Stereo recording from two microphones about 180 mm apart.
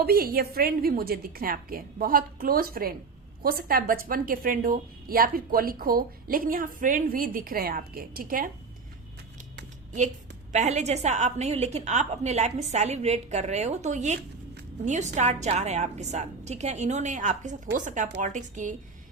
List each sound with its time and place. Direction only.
0.0 s a woman's voice: 55° right (ahead or behind)
10.5 s a woman's voice: 40° right (ahead or behind)